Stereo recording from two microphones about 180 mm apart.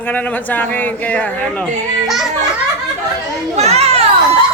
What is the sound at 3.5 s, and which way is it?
Children playing, 35° right (ahead or behind).